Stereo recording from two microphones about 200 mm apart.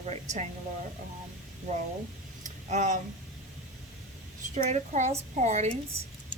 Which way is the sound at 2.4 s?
35° right (ahead or behind).